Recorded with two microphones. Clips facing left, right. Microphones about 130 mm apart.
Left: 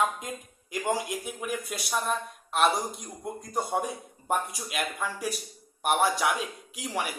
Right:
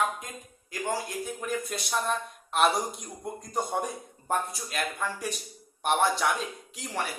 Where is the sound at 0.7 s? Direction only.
15° left (ahead or behind).